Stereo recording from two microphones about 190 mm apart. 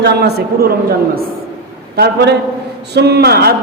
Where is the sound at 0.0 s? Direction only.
60° right (ahead or behind).